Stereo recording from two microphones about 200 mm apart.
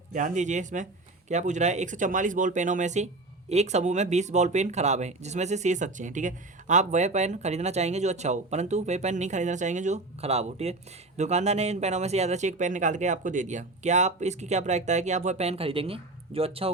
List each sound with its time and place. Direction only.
0.1 s speech: 40° right (ahead or behind)